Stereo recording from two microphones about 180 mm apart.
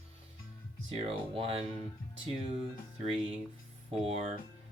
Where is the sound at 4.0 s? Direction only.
30° right (ahead or behind).